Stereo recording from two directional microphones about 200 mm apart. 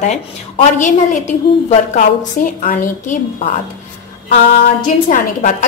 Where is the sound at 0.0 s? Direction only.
35° left (ahead or behind).